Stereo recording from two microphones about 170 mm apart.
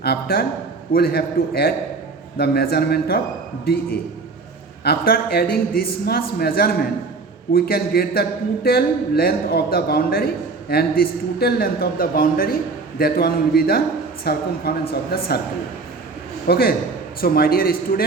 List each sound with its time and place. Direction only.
0.0 s a man's voice: 65° left (ahead or behind)
4.8 s a man's voice: 65° left (ahead or behind)
16.5 s a man's voice: 65° left (ahead or behind)